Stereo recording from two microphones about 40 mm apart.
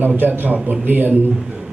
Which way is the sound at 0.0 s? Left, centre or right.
Right.